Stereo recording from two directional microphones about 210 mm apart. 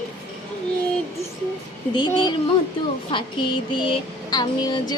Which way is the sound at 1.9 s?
20° left (ahead or behind).